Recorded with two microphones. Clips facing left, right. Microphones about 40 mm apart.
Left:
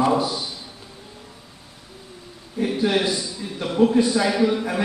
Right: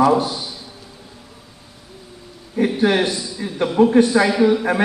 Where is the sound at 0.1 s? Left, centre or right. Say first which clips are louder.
Right 3 dB; right.